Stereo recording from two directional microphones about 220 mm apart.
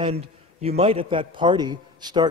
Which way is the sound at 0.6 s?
25° right (ahead or behind).